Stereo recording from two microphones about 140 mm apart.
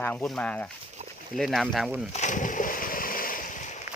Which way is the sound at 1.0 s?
50° right (ahead or behind).